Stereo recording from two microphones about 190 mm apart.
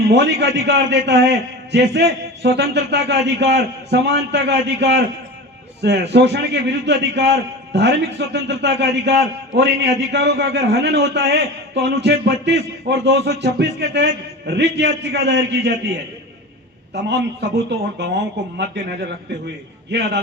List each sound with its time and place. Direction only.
0.1 s a man's voice: 60° right (ahead or behind)
17.7 s a man's voice: 65° right (ahead or behind)